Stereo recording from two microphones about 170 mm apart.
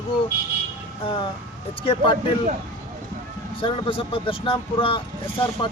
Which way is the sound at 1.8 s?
30° left (ahead or behind).